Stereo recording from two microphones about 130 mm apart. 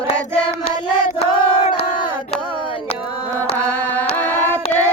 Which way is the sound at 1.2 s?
50° left (ahead or behind).